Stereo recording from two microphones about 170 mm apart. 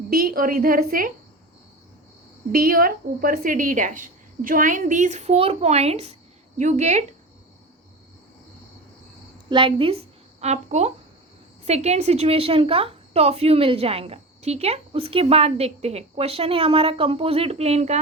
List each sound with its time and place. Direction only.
0.1 s a woman's voice: 55° right (ahead or behind)
2.5 s a woman's voice: 60° right (ahead or behind)
9.5 s a woman's voice: 30° right (ahead or behind)